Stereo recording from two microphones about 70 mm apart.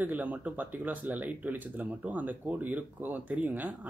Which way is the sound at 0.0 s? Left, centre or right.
Right.